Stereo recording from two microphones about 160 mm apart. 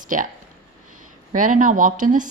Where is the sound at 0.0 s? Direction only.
55° right (ahead or behind).